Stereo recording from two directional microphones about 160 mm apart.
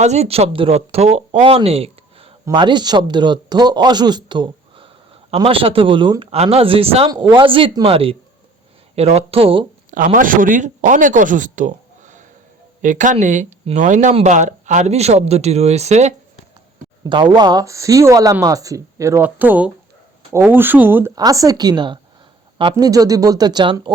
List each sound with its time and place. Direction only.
0.0 s speech: 45° right (ahead or behind)
9.9 s speech: 60° right (ahead or behind)
17.0 s speech: 30° right (ahead or behind)